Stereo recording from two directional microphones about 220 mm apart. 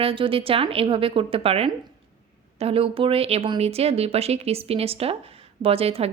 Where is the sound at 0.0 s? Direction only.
25° right (ahead or behind).